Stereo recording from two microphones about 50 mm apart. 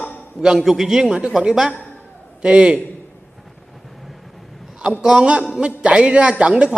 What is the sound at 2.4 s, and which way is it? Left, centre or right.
Speech, centre.